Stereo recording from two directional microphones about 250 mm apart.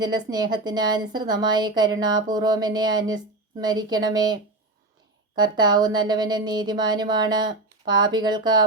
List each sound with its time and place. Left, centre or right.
0.0 s a woman's voice: centre